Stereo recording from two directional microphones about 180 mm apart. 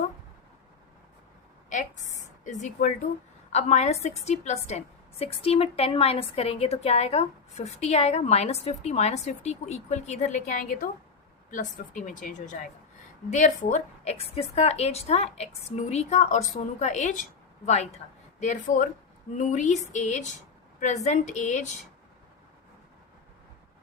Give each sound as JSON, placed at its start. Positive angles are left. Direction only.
{"t": 2.4, "sound": "a woman's voice", "side_deg": 40}